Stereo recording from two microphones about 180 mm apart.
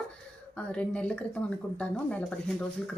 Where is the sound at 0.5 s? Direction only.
5° left (ahead or behind).